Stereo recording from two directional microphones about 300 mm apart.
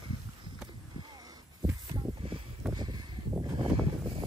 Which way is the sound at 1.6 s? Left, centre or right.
Centre.